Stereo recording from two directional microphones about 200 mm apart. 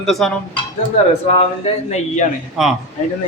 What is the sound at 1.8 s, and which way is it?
Speech, 35° left (ahead or behind).